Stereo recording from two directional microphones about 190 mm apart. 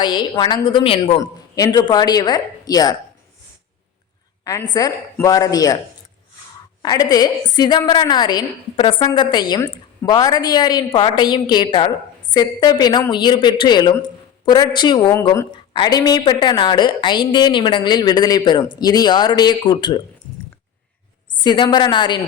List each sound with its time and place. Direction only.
0.0 s a woman's voice: 25° left (ahead or behind)
4.7 s a woman's voice: 20° left (ahead or behind)
6.8 s a woman's voice: 20° left (ahead or behind)
21.4 s a woman's voice: 25° left (ahead or behind)